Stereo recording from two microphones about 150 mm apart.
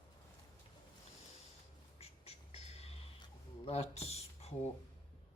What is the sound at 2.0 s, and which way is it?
Bird, 40° left (ahead or behind).